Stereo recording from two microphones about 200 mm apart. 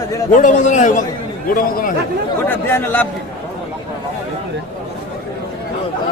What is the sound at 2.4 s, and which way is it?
Speech, 10° left (ahead or behind).